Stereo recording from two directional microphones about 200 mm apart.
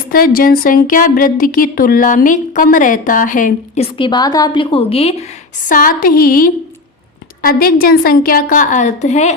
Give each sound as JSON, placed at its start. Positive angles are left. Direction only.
{"t": 0.1, "sound": "speech", "side_deg": 45}
{"t": 3.9, "sound": "a woman's voice", "side_deg": 25}